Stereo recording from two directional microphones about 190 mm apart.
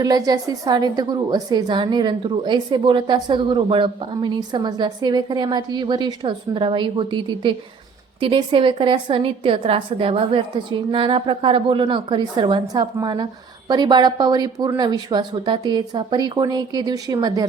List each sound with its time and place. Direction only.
0.0 s a woman's voice: 20° right (ahead or behind)